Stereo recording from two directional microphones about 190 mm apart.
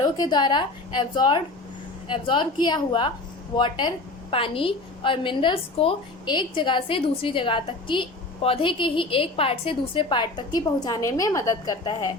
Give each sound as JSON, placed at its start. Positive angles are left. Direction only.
{"t": 0.0, "sound": "a woman's voice", "side_deg": 20}